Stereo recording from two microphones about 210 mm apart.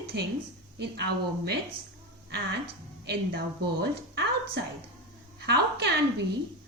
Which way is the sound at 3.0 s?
55° right (ahead or behind).